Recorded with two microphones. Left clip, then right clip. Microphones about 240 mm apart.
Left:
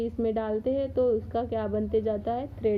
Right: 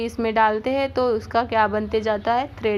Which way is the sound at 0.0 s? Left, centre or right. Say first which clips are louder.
Right 9 dB; centre.